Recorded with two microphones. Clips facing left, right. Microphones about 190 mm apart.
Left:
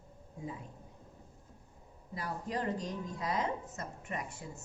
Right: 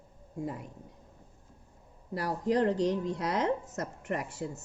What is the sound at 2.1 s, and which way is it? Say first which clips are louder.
A woman's voice: right 9 dB; 75° right (ahead or behind).